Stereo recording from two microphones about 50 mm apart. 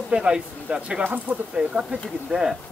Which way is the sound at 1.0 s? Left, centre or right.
Right.